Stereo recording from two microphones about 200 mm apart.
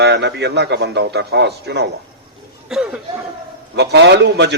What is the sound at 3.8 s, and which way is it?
Speech, 60° right (ahead or behind).